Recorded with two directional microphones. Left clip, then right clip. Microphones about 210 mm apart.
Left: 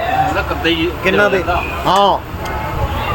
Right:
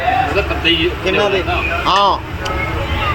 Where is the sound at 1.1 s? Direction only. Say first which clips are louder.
Left 4 dB; 40° left (ahead or behind).